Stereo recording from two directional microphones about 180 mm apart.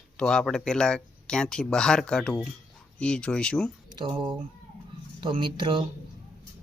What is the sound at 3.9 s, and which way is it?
Speech, 25° right (ahead or behind).